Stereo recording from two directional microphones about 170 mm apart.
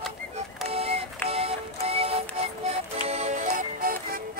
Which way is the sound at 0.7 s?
35° right (ahead or behind).